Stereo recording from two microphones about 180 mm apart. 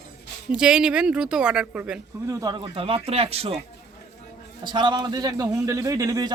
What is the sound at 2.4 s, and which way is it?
Speech, 25° right (ahead or behind).